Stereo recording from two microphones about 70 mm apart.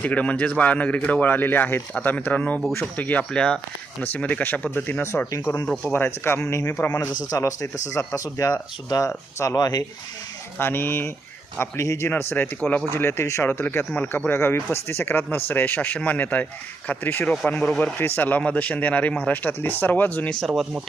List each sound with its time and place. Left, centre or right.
0.0 s speech: centre
5.6 s speech: centre
5.9 s speech: left
6.7 s speech: left
7.3 s speech: left
10.6 s speech: left
11.6 s speech: left
17.4 s speech: centre